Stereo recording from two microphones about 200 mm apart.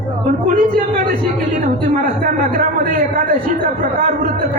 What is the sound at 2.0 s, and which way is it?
A man's voice, 45° right (ahead or behind).